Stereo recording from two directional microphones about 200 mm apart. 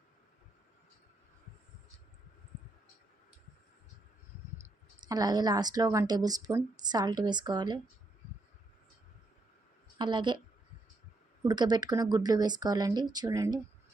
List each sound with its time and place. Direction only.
5.0 s a woman's voice: 20° right (ahead or behind)
10.0 s a woman's voice: 25° right (ahead or behind)
11.4 s a woman's voice: 20° right (ahead or behind)